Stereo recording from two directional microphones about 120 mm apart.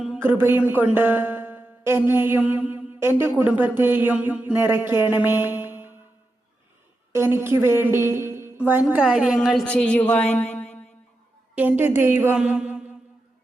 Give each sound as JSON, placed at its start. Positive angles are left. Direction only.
{"t": 0.2, "sound": "speech", "side_deg": -20}
{"t": 7.1, "sound": "a woman's voice", "side_deg": -20}
{"t": 8.1, "sound": "music", "side_deg": -25}
{"t": 8.5, "sound": "a woman's voice", "side_deg": -15}
{"t": 9.6, "sound": "a woman's voice", "side_deg": 10}
{"t": 11.8, "sound": "a woman's voice", "side_deg": -20}
{"t": 12.4, "sound": "a sound", "side_deg": -10}